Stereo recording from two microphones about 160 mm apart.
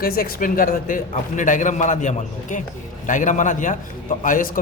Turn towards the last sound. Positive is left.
turn(degrees=55)  # may be behind; listen again after turning